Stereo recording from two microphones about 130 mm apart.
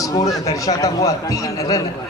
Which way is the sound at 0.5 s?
25° left (ahead or behind).